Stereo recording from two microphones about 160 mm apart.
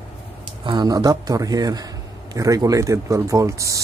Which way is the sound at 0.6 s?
25° right (ahead or behind).